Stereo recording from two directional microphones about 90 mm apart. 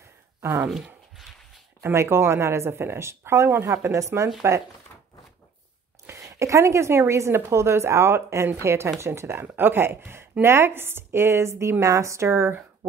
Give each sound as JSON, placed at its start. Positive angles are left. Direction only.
{"t": 0.4, "sound": "speech", "side_deg": -30}
{"t": 1.8, "sound": "a woman's voice", "side_deg": -30}
{"t": 6.0, "sound": "a woman's voice", "side_deg": -30}